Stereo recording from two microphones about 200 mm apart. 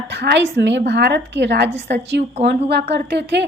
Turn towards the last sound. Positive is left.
turn(degrees=-60)  # may be behind; listen again after turning